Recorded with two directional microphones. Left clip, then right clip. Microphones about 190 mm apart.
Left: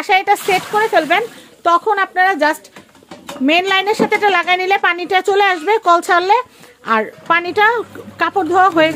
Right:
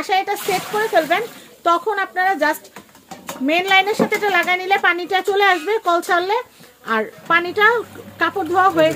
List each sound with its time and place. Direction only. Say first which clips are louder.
0.0 s a woman's voice: left 6 dB; 40° left (ahead or behind)